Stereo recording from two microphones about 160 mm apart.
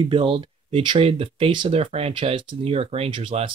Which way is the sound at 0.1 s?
30° right (ahead or behind).